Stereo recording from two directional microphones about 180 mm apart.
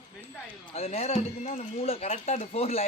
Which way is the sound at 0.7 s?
35° left (ahead or behind).